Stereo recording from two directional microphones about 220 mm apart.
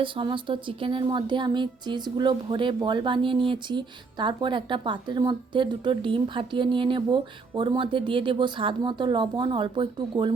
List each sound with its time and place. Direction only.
0.0 s speech: 20° right (ahead or behind)